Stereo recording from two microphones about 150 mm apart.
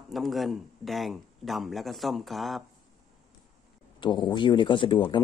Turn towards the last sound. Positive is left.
turn(degrees=35)  # may be behind; listen again after turning